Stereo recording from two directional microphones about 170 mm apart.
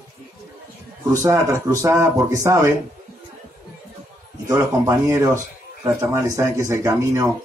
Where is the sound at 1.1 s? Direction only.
20° right (ahead or behind).